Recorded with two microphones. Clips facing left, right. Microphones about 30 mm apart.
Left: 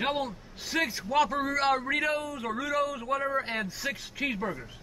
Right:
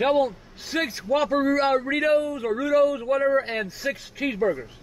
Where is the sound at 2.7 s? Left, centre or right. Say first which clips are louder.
Right 9 dB; centre.